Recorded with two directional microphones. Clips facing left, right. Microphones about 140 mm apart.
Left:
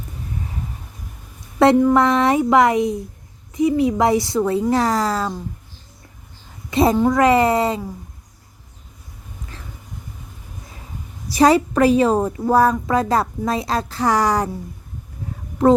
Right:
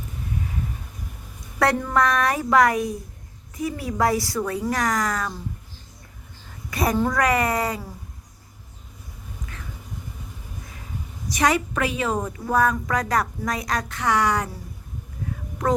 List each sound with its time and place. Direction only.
1.8 s speech: 20° left (ahead or behind)
6.7 s a woman's voice: 25° left (ahead or behind)
11.3 s a woman's voice: 30° left (ahead or behind)